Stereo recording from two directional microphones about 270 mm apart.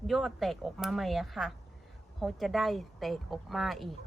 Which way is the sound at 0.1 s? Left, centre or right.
Centre.